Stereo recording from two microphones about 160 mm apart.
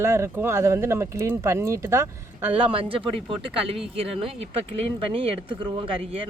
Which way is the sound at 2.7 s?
35° right (ahead or behind).